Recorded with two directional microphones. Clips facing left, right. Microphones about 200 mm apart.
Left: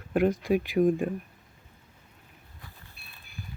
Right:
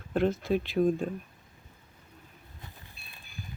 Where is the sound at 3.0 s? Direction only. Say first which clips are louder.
Even; 60° left (ahead or behind).